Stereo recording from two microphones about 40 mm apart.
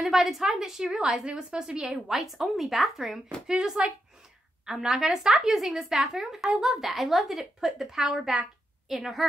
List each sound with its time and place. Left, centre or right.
0.1 s a woman's voice: centre
2.1 s a woman's voice: centre
3.4 s a woman's voice: centre